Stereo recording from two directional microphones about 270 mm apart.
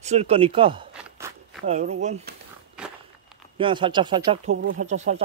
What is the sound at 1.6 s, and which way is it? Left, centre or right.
Speech, right.